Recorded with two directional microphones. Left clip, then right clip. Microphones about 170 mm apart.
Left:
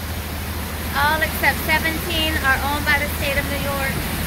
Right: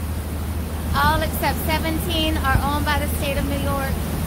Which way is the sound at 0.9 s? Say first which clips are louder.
Left 1 dB; 15° right (ahead or behind).